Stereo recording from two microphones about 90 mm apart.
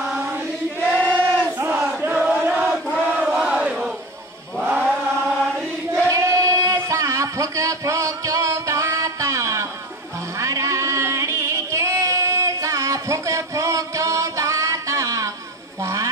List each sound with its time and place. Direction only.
0.2 s choir: 25° right (ahead or behind)
0.8 s a sound: 15° left (ahead or behind)
1.7 s battle cry: 10° right (ahead or behind)
2.1 s chant: 5° right (ahead or behind)
3.1 s battle cry: 10° right (ahead or behind)
4.6 s chant: 5° right (ahead or behind)
5.2 s chant: 5° left (ahead or behind)
6.0 s a sound: 40° right (ahead or behind)